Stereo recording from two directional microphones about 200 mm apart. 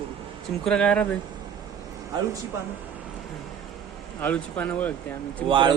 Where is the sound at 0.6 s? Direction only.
5° left (ahead or behind).